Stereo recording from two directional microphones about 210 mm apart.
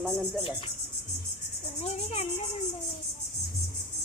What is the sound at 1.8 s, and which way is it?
Speech, 30° left (ahead or behind).